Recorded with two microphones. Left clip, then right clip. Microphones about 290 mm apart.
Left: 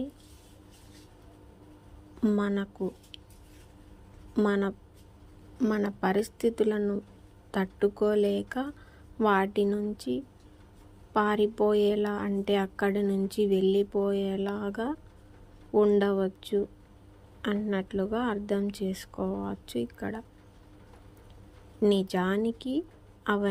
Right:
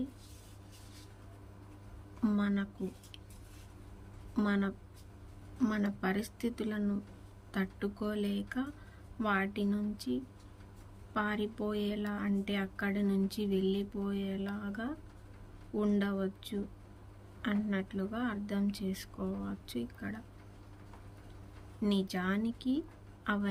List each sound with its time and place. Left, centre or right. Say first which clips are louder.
2.2 s speech: left 6 dB; centre
4.4 s speech: left 7 dB; centre
21.8 s speech: left 10 dB; centre